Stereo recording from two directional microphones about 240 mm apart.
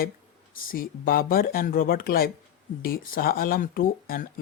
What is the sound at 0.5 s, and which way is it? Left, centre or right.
Speech, left.